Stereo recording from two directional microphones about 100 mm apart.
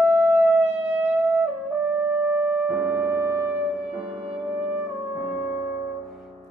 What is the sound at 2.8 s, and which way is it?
Music, 20° right (ahead or behind).